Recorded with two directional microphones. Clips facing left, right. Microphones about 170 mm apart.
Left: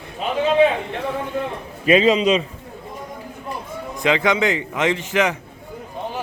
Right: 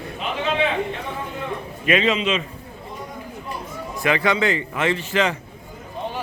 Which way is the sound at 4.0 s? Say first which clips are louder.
Left 2 dB; 15° left (ahead or behind).